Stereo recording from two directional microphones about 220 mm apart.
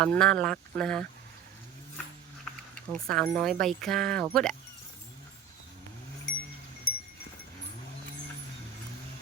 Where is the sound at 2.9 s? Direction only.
5° left (ahead or behind).